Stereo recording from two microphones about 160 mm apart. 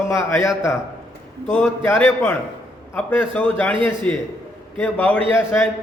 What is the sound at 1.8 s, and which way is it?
A man's voice, 15° left (ahead or behind).